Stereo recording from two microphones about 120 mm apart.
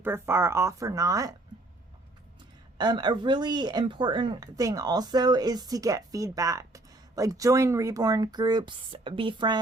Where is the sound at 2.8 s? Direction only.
35° right (ahead or behind).